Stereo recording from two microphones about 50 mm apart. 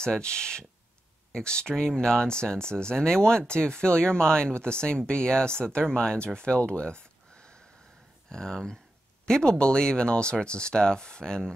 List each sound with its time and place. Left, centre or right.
0.0 s speech: centre
8.3 s speech: centre